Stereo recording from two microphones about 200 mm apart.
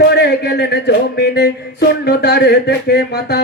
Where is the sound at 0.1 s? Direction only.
55° left (ahead or behind).